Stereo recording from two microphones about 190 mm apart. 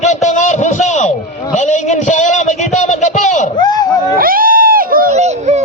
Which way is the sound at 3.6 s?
20° left (ahead or behind).